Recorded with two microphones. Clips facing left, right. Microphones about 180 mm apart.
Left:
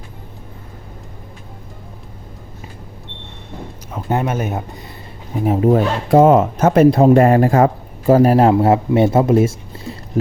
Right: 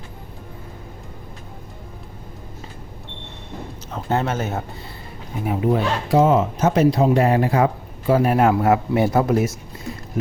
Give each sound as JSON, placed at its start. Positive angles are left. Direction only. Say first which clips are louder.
{"t": 3.9, "sound": "speech", "louder": "left 2 dB", "side_deg": 15}
{"t": 5.5, "sound": "speech", "louder": "left 5 dB", "side_deg": 40}